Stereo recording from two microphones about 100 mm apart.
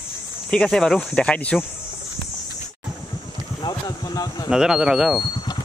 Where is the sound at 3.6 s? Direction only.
40° left (ahead or behind).